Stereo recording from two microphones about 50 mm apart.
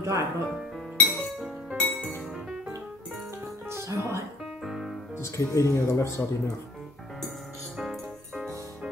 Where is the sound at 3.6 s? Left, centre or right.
Right.